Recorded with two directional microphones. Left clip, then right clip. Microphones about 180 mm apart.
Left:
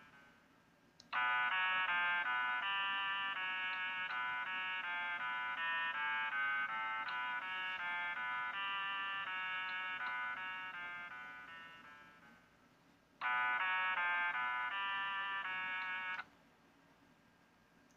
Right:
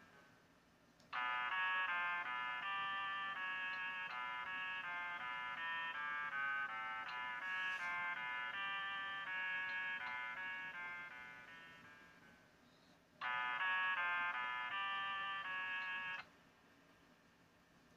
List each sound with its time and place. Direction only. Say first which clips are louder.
1.1 s fire alarm: left 5 dB; 25° left (ahead or behind)
13.2 s music: left 5 dB; 20° left (ahead or behind)